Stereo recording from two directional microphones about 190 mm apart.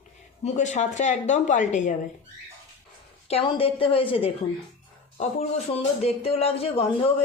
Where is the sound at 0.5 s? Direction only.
40° left (ahead or behind).